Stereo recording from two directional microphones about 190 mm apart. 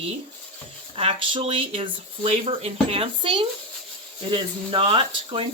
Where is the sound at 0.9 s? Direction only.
30° right (ahead or behind).